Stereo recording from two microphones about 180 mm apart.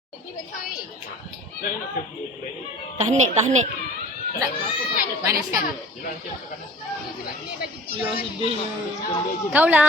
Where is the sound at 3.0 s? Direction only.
40° right (ahead or behind).